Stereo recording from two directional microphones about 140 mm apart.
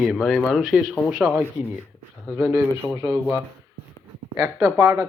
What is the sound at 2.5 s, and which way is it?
Speech, 20° right (ahead or behind).